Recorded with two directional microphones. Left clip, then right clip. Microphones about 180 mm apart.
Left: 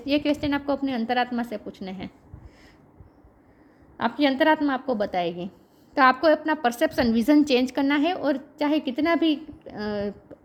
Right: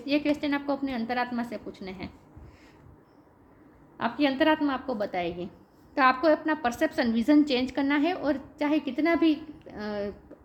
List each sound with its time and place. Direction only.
0.0 s a woman's voice: 50° left (ahead or behind)
3.9 s a woman's voice: 50° left (ahead or behind)